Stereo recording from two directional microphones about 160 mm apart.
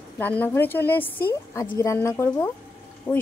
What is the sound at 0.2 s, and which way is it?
Speech, 10° left (ahead or behind).